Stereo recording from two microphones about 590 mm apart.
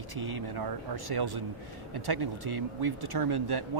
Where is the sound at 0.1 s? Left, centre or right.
Right.